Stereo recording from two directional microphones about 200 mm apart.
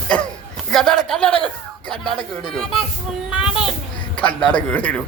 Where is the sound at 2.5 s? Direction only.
Centre (ahead or behind).